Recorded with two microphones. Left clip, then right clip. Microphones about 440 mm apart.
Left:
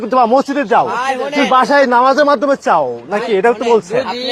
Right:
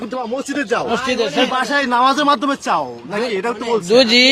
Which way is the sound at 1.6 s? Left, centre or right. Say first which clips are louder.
Left 7 dB; centre.